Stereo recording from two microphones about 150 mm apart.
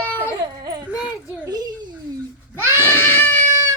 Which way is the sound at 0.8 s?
10° right (ahead or behind).